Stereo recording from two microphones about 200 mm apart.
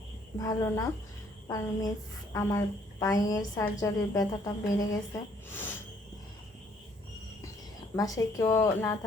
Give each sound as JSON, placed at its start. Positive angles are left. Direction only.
{"t": 0.3, "sound": "a woman's voice", "side_deg": 15}
{"t": 7.9, "sound": "a woman's voice", "side_deg": 15}